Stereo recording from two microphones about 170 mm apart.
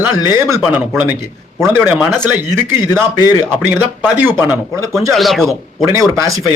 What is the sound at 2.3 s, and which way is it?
Speech, 15° right (ahead or behind).